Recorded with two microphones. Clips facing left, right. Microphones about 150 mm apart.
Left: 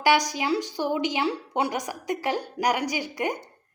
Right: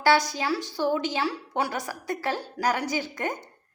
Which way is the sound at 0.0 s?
15° left (ahead or behind).